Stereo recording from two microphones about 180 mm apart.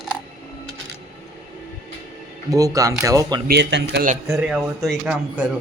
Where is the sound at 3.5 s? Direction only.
70° right (ahead or behind).